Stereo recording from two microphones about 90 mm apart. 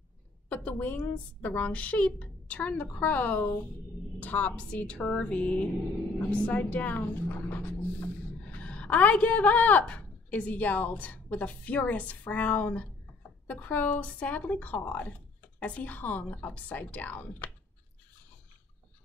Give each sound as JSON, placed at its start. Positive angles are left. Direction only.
{"t": 0.5, "sound": "a woman's voice", "side_deg": 20}